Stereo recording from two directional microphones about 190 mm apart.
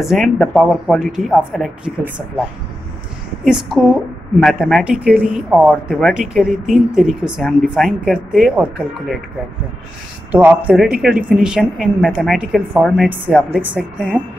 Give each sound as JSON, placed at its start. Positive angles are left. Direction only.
{"t": 0.0, "sound": "a woman's voice", "side_deg": 0}
{"t": 3.4, "sound": "a woman's voice", "side_deg": -5}
{"t": 10.3, "sound": "a woman's voice", "side_deg": -5}